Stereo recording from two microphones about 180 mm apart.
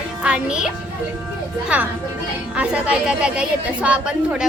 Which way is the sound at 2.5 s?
5° right (ahead or behind).